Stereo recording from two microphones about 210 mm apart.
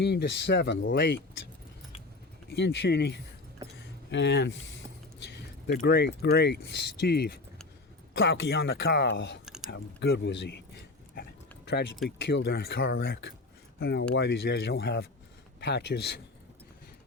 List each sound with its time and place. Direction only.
0.0 s speech: 50° left (ahead or behind)
2.5 s speech: 55° left (ahead or behind)
5.8 s speech: 50° left (ahead or behind)
11.1 s a sound: 50° left (ahead or behind)
12.0 s speech: 55° left (ahead or behind)